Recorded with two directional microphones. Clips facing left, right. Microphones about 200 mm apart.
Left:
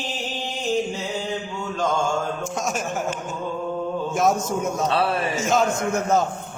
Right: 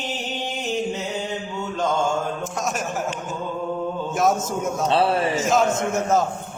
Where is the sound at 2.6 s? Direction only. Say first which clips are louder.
Right 1 dB; centre (ahead or behind).